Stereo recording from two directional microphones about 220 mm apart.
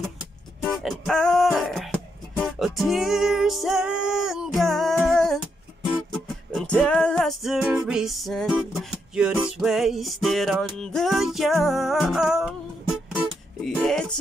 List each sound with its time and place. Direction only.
0.0 s music: centre (ahead or behind)
13.7 s speech: 5° left (ahead or behind)